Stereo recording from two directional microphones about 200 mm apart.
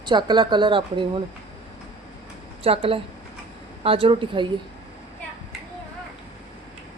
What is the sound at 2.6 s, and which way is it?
A woman's voice, 30° right (ahead or behind).